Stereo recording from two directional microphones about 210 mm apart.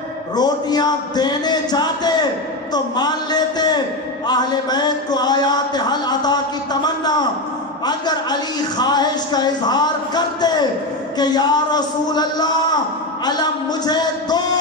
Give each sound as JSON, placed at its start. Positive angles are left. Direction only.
{"t": 0.4, "sound": "a man's voice", "side_deg": 20}